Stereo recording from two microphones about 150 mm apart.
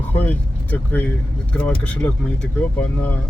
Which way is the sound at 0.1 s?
10° left (ahead or behind).